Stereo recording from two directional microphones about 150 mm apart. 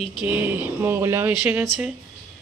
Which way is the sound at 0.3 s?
10° right (ahead or behind).